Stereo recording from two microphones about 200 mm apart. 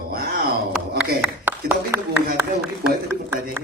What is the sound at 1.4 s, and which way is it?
Speech, 10° right (ahead or behind).